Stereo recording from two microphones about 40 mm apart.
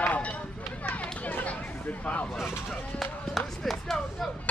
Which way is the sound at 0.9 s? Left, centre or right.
Left.